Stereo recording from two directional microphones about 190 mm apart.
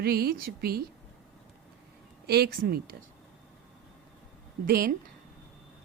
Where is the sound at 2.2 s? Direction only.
55° right (ahead or behind).